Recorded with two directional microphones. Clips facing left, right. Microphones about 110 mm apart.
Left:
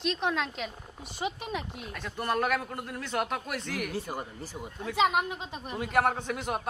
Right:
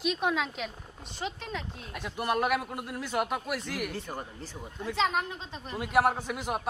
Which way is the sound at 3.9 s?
10° left (ahead or behind).